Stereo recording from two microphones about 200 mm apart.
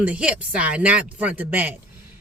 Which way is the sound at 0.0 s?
5° right (ahead or behind).